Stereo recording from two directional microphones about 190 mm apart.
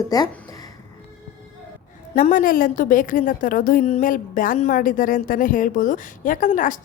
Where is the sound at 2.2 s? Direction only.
45° left (ahead or behind).